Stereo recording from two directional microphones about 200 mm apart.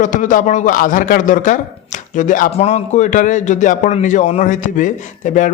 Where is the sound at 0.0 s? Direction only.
40° left (ahead or behind).